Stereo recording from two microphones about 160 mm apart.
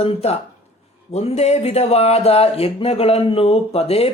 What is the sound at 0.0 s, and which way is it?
A woman's voice, 40° left (ahead or behind).